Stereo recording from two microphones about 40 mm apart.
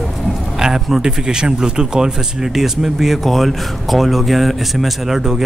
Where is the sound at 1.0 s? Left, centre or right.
Centre.